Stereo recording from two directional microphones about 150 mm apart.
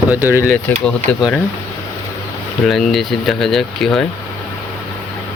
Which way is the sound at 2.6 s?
Centre (ahead or behind).